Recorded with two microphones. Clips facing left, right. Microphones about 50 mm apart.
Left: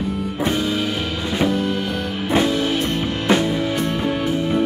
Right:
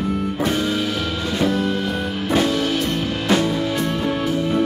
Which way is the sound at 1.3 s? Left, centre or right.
Centre.